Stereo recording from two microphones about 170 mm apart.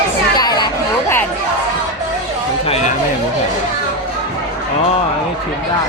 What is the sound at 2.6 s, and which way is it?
Chatter, 40° left (ahead or behind).